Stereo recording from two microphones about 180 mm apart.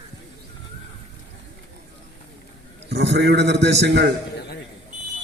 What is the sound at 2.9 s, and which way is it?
A man's voice, 70° right (ahead or behind).